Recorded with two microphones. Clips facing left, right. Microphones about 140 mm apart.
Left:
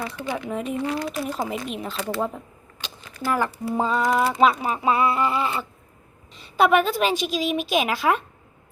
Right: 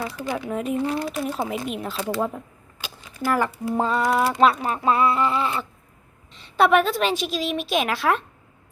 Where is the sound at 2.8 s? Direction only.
15° right (ahead or behind).